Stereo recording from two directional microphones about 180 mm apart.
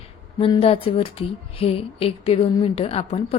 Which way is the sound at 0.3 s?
30° left (ahead or behind).